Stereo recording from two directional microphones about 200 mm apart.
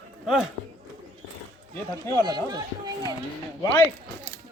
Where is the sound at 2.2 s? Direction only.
20° right (ahead or behind).